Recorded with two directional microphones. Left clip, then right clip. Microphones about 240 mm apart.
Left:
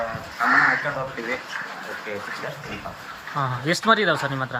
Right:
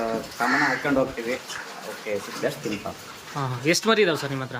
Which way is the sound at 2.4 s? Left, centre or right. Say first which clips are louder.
Right 6 dB; right.